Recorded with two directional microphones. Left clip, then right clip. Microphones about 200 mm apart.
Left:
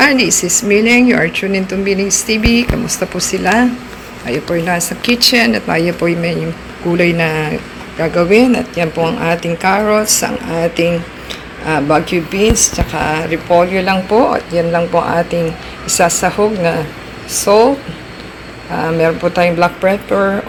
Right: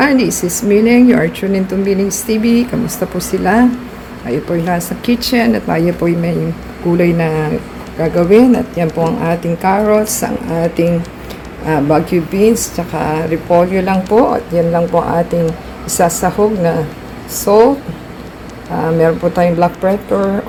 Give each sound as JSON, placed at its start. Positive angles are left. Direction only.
{"t": 0.0, "sound": "speech", "side_deg": -5}
{"t": 18.7, "sound": "speech", "side_deg": -5}